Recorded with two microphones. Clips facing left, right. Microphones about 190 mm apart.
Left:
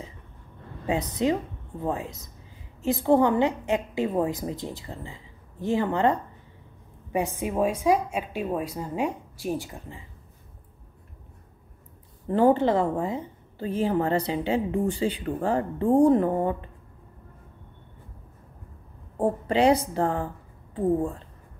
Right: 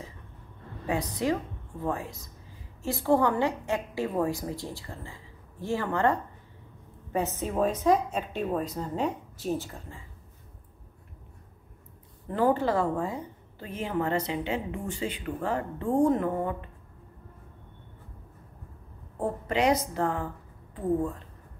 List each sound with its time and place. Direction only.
0.8 s a woman's voice: 20° left (ahead or behind)
12.3 s a woman's voice: 25° left (ahead or behind)
19.1 s a woman's voice: 30° left (ahead or behind)